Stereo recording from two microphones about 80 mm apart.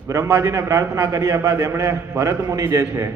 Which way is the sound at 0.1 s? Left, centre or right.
Right.